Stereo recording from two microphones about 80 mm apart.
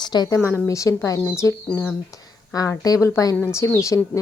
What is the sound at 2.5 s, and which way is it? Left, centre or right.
A woman's voice, left.